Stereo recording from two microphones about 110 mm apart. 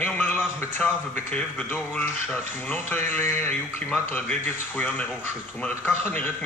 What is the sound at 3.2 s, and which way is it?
Speech, 20° left (ahead or behind).